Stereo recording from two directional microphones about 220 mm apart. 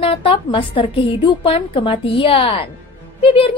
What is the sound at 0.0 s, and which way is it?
A woman's voice, 25° left (ahead or behind).